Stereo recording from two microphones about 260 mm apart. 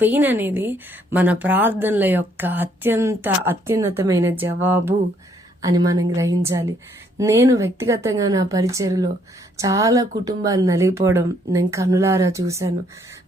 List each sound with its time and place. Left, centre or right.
0.0 s speech: centre